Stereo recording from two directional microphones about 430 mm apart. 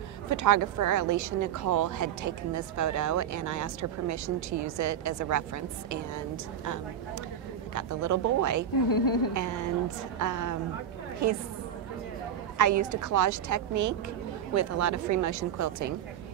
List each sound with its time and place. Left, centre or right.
0.3 s speech: right
8.8 s speech: left
9.3 s a woman's voice: right
12.5 s a woman's voice: right